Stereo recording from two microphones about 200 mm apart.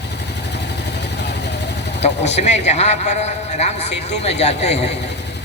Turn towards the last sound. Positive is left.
turn(degrees=35)  # may be behind; listen again after turning